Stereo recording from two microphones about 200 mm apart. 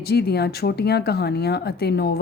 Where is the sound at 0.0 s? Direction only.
50° left (ahead or behind).